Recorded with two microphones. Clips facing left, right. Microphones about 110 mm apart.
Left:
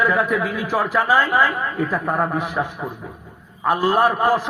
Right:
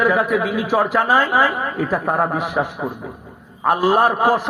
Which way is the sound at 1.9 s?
25° right (ahead or behind).